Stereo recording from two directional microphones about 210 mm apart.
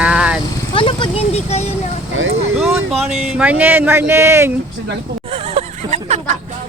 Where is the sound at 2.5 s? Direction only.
5° right (ahead or behind).